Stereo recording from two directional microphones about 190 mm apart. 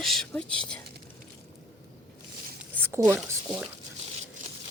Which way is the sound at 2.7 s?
10° right (ahead or behind).